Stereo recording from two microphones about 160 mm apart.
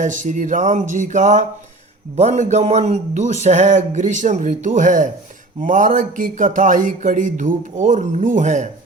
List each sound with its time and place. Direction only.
0.0 s speech: 50° right (ahead or behind)